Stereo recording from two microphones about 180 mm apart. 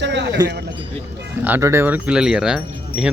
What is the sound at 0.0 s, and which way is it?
Speech, 75° right (ahead or behind).